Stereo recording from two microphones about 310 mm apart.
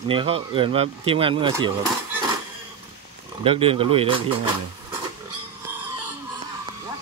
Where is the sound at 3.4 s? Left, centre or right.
Centre.